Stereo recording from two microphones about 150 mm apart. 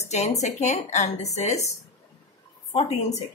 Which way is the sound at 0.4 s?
50° left (ahead or behind).